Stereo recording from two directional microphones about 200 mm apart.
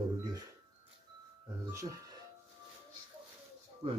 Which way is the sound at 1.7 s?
15° right (ahead or behind).